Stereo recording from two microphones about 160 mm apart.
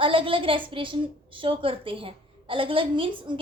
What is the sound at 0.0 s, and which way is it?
A woman's voice, 35° right (ahead or behind).